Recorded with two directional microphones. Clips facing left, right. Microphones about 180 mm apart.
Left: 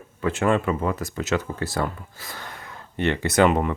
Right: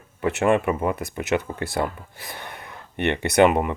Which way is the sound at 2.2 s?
20° right (ahead or behind).